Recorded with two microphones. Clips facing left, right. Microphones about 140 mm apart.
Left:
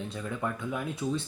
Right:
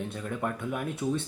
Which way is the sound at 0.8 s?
55° right (ahead or behind).